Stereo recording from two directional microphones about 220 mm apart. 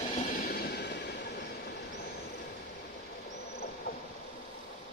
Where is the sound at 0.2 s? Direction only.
45° left (ahead or behind).